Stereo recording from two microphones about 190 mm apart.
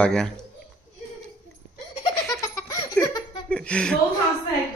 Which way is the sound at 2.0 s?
20° left (ahead or behind).